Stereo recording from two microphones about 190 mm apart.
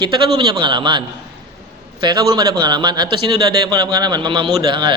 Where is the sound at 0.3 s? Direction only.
25° right (ahead or behind).